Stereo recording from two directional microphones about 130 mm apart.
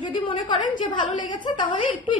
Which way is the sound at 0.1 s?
40° left (ahead or behind).